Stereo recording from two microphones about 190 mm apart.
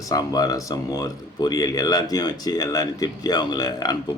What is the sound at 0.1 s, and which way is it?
Speech, 20° left (ahead or behind).